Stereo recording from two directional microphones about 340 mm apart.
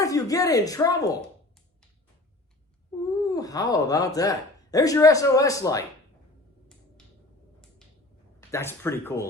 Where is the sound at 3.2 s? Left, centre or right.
Centre.